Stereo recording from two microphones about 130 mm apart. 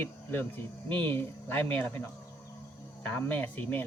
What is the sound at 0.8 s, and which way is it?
Speech, 40° right (ahead or behind).